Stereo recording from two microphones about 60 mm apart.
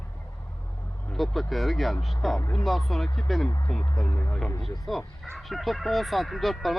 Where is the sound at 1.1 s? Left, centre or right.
Centre.